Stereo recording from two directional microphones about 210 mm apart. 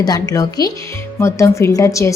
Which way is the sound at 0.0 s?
15° left (ahead or behind).